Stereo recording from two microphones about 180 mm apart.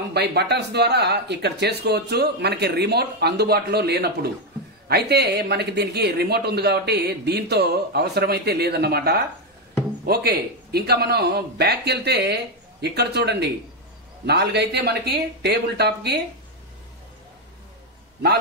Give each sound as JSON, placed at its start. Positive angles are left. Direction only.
{"t": 0.1, "sound": "speech", "side_deg": -65}